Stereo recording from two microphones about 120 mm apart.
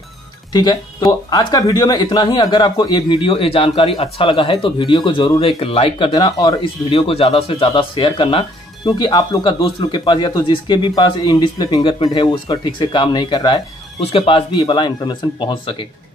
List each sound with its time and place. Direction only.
0.5 s speech: 35° left (ahead or behind)
6.1 s speech: 35° left (ahead or behind)
6.9 s speech: 50° left (ahead or behind)
13.9 s speech: 55° left (ahead or behind)